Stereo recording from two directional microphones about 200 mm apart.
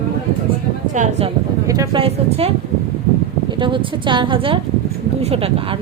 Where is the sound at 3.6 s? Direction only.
25° right (ahead or behind).